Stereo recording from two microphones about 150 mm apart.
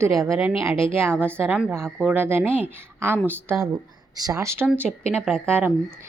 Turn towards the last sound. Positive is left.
turn(degrees=-15)  # may be behind; listen again after turning